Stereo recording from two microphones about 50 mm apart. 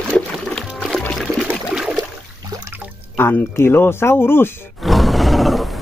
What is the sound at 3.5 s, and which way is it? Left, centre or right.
Speech, left.